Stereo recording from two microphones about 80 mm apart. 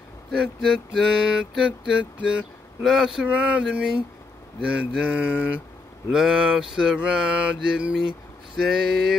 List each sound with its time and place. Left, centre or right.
0.6 s music: centre
1.7 s mantra: centre
2.8 s music: centre
3.3 s mantra: centre
8.5 s music: centre